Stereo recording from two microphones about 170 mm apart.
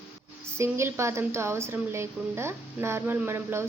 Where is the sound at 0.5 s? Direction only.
15° right (ahead or behind).